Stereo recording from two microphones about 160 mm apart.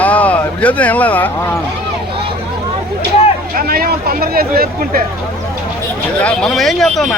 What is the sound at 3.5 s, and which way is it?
Speech, 70° right (ahead or behind).